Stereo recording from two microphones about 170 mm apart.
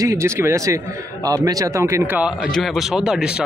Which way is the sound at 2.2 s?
Centre (ahead or behind).